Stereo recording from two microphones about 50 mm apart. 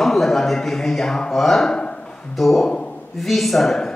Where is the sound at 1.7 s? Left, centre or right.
Centre.